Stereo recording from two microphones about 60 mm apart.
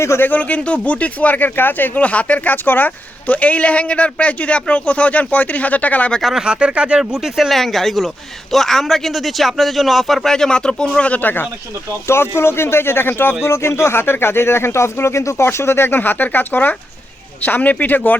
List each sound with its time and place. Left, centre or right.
0.2 s speech: left
2.0 s speech: left
6.3 s speech: centre
7.5 s a man's voice: centre; by 11.4 s left
12.0 s speech: left
13.4 s speech: left
15.4 s speech: left